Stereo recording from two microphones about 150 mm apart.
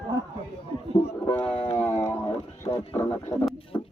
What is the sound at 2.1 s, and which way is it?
Music, 40° left (ahead or behind).